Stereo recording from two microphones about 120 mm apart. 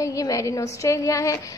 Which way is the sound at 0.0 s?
30° left (ahead or behind).